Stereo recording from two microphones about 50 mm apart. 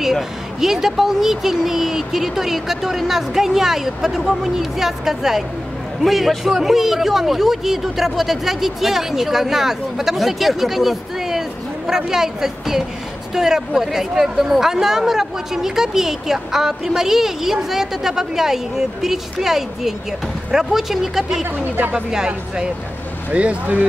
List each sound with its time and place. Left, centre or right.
0.0 s a woman's voice: centre
21.5 s speech: right
21.9 s a woman's voice: centre
23.3 s speech: right